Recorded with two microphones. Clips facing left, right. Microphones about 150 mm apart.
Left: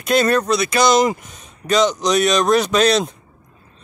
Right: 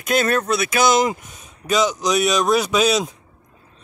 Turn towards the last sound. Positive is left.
turn(degrees=-5)  # may be behind; listen again after turning